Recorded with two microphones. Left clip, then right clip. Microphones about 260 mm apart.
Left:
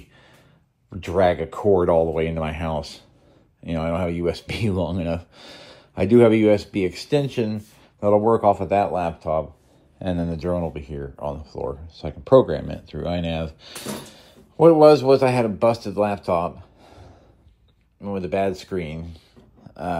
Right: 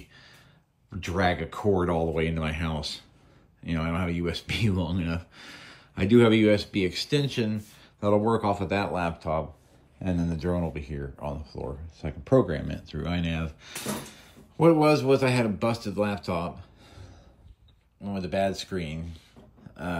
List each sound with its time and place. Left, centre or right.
0.9 s speech: centre
10.0 s speech: right
10.4 s speech: centre
18.0 s speech: centre
19.7 s roar: centre